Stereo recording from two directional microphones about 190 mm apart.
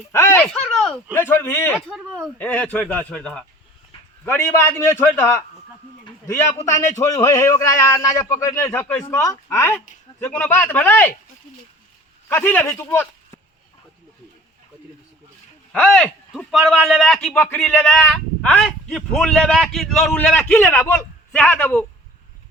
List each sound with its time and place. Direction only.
0.1 s speech: 15° left (ahead or behind)
1.1 s a man's voice: 10° left (ahead or behind)
1.9 s a man's voice: centre (ahead or behind)
6.1 s a sound: 15° left (ahead or behind)
6.6 s a man's voice: 15° left (ahead or behind)
12.3 s a man's voice: 10° left (ahead or behind)
15.7 s a man's voice: 5° left (ahead or behind)